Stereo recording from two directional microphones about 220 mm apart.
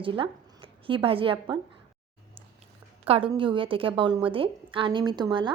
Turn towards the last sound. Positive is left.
turn(degrees=-20)  # may be behind; listen again after turning